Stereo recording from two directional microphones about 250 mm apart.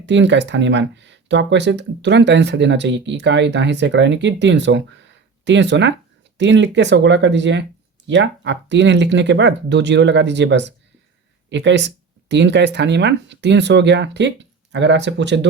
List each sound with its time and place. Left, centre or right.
0.0 s speech: right